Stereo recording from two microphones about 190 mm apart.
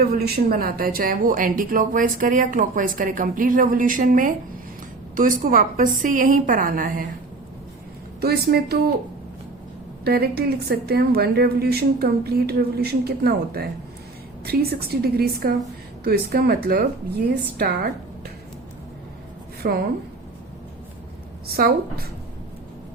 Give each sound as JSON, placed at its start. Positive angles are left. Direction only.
{"t": 0.0, "sound": "speech", "side_deg": -55}
{"t": 8.2, "sound": "a woman's voice", "side_deg": -55}
{"t": 10.0, "sound": "a woman's voice", "side_deg": -55}
{"t": 19.6, "sound": "speech", "side_deg": -55}
{"t": 21.4, "sound": "speech", "side_deg": -55}